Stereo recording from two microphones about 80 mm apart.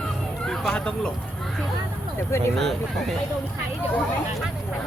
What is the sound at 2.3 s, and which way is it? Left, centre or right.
Speech, left.